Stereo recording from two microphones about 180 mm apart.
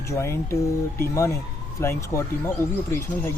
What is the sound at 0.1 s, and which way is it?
Speech, 15° left (ahead or behind).